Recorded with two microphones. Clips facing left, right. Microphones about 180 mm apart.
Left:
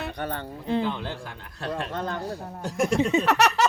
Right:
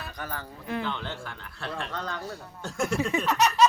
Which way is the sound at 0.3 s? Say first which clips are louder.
Left 5 dB; 30° left (ahead or behind).